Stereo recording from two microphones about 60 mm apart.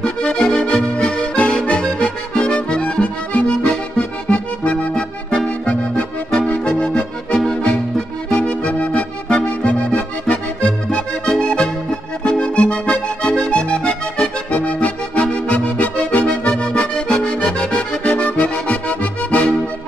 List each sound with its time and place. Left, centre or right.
0.0 s accordion: centre
3.6 s music: centre
6.5 s accordion: centre
8.3 s music: centre
10.9 s accordion: centre